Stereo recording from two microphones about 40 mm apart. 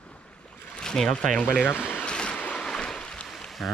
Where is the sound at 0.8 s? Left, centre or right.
Centre.